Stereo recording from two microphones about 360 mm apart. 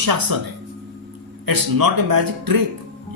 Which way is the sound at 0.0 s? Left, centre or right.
Right.